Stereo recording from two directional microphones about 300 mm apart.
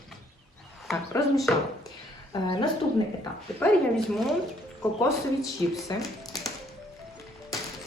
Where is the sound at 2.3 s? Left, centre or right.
Centre.